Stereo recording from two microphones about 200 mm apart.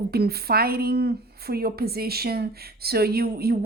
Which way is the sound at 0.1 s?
50° right (ahead or behind).